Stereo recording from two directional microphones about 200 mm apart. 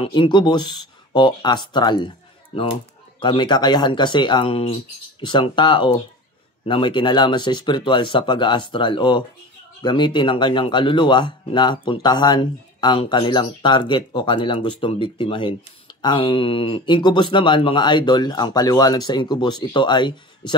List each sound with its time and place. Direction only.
0.0 s a man's voice: 25° left (ahead or behind)
3.2 s a man's voice: 20° left (ahead or behind)